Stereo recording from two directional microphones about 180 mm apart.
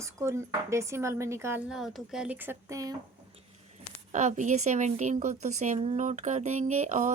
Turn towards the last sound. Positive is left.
turn(degrees=-40)  # may be behind; listen again after turning